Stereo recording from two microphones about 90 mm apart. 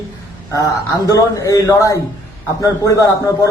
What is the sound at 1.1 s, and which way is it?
Speech, 40° left (ahead or behind).